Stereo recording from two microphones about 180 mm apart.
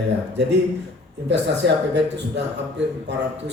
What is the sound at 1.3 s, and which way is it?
A man's voice, 75° right (ahead or behind).